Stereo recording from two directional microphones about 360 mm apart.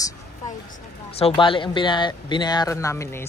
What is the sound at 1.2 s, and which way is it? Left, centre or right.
Speech, centre.